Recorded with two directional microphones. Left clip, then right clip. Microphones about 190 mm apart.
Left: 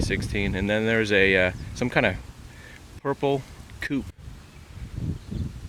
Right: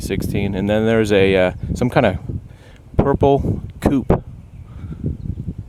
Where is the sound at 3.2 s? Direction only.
30° right (ahead or behind).